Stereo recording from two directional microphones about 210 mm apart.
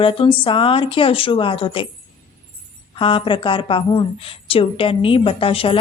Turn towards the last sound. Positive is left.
turn(degrees=25)  # may be behind; listen again after turning